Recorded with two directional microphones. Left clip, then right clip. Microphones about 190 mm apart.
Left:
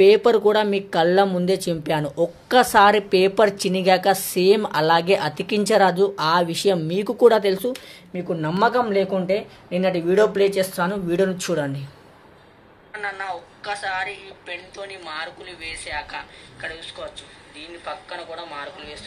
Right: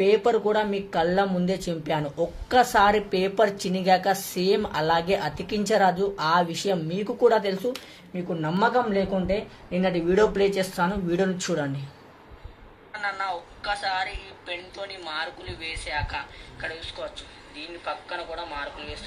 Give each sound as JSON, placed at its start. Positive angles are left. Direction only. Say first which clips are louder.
{"t": 0.0, "sound": "speech", "louder": "left 7 dB", "side_deg": 45}
{"t": 12.9, "sound": "a woman's voice", "louder": "even", "side_deg": 10}